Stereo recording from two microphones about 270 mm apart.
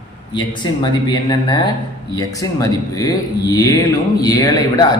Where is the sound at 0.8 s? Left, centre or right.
Centre.